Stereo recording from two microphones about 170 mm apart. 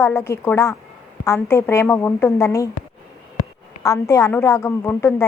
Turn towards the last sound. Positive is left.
turn(degrees=15)  # may be behind; listen again after turning